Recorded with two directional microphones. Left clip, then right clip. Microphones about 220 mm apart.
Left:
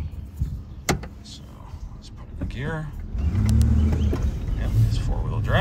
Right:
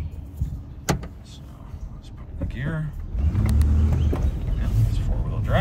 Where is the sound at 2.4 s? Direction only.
15° left (ahead or behind).